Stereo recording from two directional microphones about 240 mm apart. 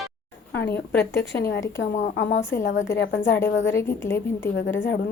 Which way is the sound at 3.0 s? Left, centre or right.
Left.